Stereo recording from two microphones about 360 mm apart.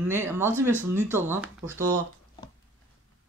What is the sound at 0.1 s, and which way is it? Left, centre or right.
Speech, centre.